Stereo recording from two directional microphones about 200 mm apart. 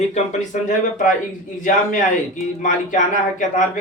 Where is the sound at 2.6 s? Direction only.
40° left (ahead or behind).